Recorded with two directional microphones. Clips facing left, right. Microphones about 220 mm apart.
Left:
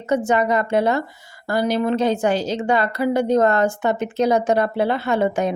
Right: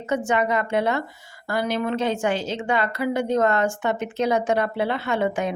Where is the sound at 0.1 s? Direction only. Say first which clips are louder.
Left 4 dB; 40° left (ahead or behind).